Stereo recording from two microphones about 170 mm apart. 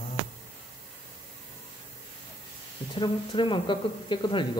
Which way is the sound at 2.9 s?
30° left (ahead or behind).